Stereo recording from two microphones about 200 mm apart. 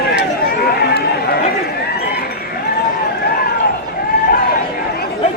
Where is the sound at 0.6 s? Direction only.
50° left (ahead or behind).